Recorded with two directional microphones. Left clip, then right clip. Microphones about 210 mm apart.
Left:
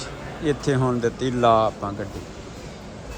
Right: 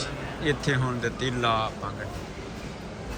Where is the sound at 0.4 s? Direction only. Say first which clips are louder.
Left 5 dB; 15° left (ahead or behind).